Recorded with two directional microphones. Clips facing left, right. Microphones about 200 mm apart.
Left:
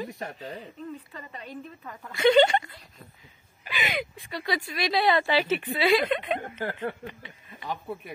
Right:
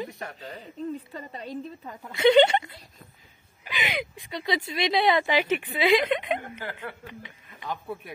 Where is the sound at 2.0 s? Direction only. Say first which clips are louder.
Right 1 dB; 20° right (ahead or behind).